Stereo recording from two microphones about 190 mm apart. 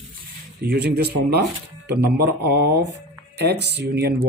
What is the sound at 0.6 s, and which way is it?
Speech, 60° right (ahead or behind).